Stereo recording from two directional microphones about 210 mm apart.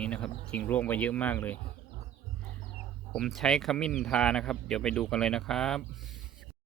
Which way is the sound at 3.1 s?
Centre (ahead or behind).